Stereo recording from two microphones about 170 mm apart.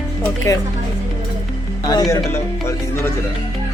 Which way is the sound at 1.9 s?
20° left (ahead or behind).